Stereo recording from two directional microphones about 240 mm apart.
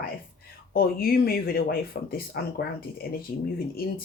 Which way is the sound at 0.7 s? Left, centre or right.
Left.